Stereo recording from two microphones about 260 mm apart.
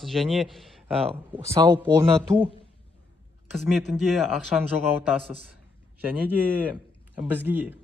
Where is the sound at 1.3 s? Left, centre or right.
Centre.